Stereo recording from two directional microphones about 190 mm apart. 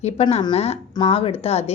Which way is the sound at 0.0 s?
35° left (ahead or behind).